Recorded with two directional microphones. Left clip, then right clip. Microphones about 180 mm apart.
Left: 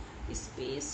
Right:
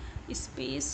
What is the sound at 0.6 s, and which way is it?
Speech, 55° right (ahead or behind).